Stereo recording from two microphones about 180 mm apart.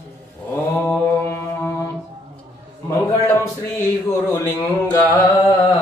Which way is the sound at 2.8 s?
15° left (ahead or behind).